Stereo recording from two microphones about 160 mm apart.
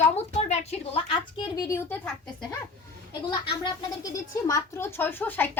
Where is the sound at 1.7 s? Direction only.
15° left (ahead or behind).